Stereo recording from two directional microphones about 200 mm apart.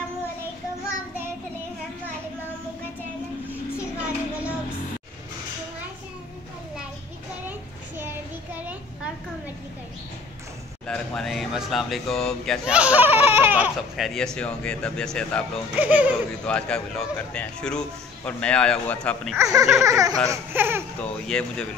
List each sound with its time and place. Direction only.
8.5 s children playing: 5° right (ahead or behind)
10.9 s a man's voice: centre (ahead or behind)
15.8 s speech: 5° right (ahead or behind)
16.4 s a man's voice: 5° left (ahead or behind)
19.3 s speech: 15° right (ahead or behind)
21.0 s a man's voice: 5° left (ahead or behind)